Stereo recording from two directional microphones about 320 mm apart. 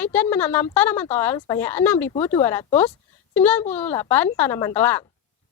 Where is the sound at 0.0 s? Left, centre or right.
Centre.